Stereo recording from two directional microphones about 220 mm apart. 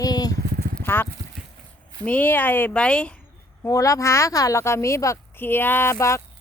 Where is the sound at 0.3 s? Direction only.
45° right (ahead or behind).